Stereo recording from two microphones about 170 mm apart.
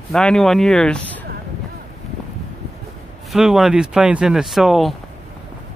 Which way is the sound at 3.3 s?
Centre (ahead or behind).